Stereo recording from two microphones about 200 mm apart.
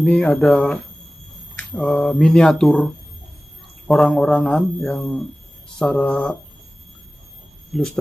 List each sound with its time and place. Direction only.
0.0 s speech: 5° left (ahead or behind)
7.7 s speech: centre (ahead or behind)